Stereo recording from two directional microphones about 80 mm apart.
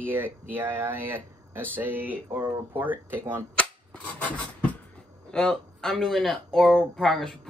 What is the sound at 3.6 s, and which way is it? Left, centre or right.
Cap gun, centre.